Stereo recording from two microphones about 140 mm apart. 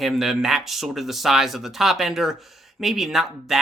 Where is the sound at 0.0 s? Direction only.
Centre (ahead or behind).